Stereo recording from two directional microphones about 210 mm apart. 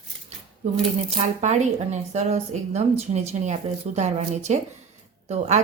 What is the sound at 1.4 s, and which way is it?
Speech, 35° right (ahead or behind).